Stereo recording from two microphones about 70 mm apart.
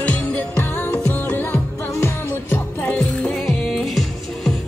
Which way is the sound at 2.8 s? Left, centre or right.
Centre.